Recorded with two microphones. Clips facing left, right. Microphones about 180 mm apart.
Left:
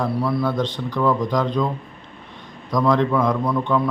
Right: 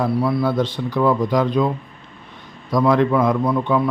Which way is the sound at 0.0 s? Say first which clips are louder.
Right 3 dB; centre (ahead or behind).